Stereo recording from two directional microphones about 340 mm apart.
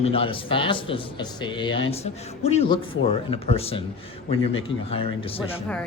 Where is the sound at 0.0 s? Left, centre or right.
Centre.